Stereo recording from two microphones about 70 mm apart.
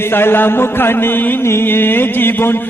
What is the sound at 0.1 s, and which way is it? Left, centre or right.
Mantra, left.